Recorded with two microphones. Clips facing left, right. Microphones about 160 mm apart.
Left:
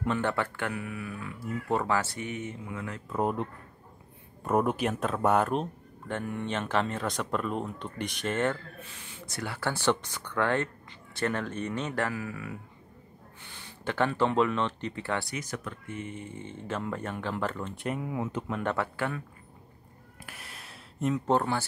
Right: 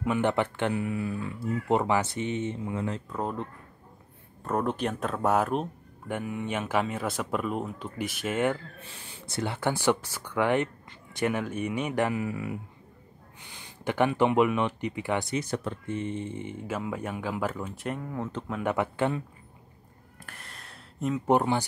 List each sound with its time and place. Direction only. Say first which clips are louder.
0.2 s speech: right 4 dB; 20° right (ahead or behind)
3.2 s speech: left 5 dB; 15° left (ahead or behind)
4.5 s speech: left 2 dB; 10° left (ahead or behind); by 8.5 s 10° right (ahead or behind)
9.2 s speech: right 4 dB; 25° right (ahead or behind)
15.3 s speech: right 6 dB; 30° right (ahead or behind); by 18.4 s 10° left (ahead or behind)
18.5 s speech: right 5 dB; 10° right (ahead or behind)
20.2 s a sound: even; 5° left (ahead or behind)
21.3 s speech: right 5 dB; 15° right (ahead or behind)